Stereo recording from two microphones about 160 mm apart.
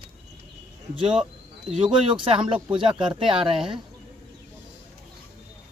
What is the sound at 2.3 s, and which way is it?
Speech, 35° right (ahead or behind).